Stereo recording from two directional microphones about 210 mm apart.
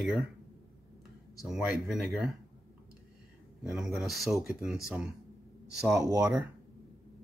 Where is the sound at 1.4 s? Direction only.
Centre (ahead or behind).